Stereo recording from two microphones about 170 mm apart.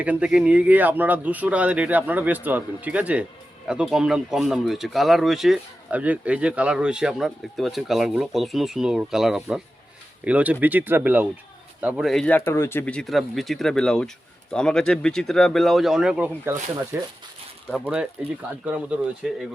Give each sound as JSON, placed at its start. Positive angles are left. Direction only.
{"t": 0.0, "sound": "a man's voice", "side_deg": -5}
{"t": 16.5, "sound": "a man's voice", "side_deg": -15}